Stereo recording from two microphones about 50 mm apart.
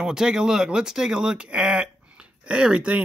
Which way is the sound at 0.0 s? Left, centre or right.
Centre.